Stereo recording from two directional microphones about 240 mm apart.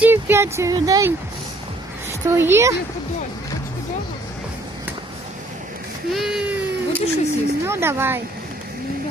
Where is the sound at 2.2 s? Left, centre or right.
Centre.